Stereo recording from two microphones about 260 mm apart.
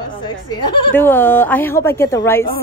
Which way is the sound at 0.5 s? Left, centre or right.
Centre.